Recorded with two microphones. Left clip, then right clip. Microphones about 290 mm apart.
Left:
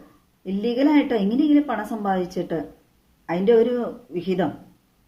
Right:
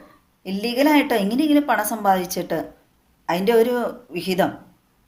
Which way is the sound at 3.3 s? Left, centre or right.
Right.